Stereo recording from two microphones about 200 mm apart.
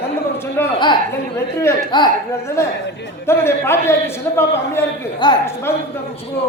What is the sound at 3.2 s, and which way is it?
A man's voice, 10° left (ahead or behind).